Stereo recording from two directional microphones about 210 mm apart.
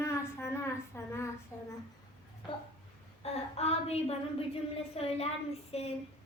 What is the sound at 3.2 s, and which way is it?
Speech, 30° left (ahead or behind).